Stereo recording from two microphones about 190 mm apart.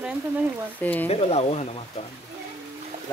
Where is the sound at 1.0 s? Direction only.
35° left (ahead or behind).